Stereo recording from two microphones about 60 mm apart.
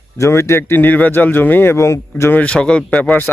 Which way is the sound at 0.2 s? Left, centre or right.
Left.